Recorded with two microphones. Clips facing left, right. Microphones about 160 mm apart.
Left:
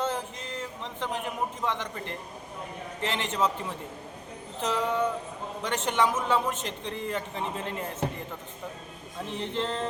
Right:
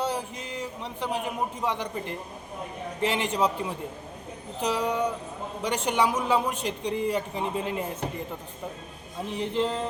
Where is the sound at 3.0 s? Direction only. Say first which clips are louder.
Right 3 dB; 15° right (ahead or behind).